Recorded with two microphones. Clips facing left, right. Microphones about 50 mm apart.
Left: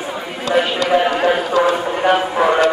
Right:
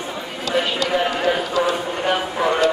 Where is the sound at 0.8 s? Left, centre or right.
Left.